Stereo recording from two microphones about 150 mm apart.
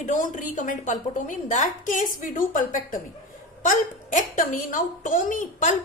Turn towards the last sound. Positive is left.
turn(degrees=60)  # may be behind; listen again after turning